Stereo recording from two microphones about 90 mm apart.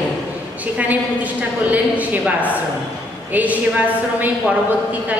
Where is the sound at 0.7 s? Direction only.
15° right (ahead or behind).